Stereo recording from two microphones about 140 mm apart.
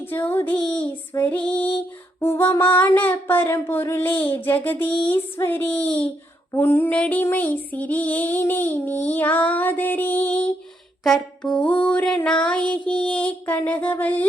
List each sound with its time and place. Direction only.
0.1 s child singing: 15° left (ahead or behind)
2.2 s female singing: 20° left (ahead or behind)
2.7 s child singing: 15° left (ahead or behind)